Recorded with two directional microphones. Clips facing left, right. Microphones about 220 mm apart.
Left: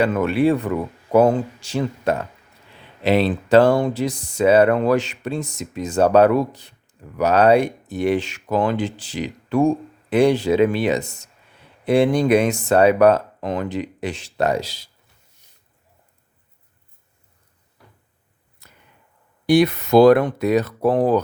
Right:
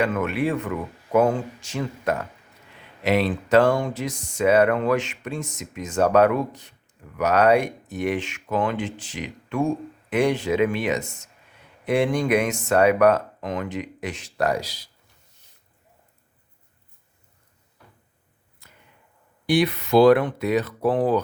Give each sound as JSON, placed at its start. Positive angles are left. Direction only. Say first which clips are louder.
{"t": 0.0, "sound": "speech", "louder": "left 5 dB", "side_deg": 35}
{"t": 19.5, "sound": "speech", "louder": "left 5 dB", "side_deg": 45}